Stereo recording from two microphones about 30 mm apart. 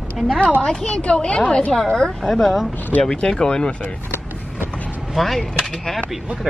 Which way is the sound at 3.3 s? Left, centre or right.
Left.